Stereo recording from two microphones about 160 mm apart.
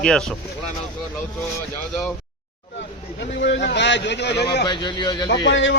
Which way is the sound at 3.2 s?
90° left.